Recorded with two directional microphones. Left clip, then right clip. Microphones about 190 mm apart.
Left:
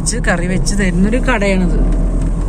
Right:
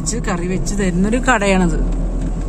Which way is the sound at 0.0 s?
10° right (ahead or behind).